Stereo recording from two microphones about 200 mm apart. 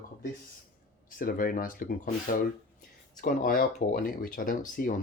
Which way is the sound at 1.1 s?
45° left (ahead or behind).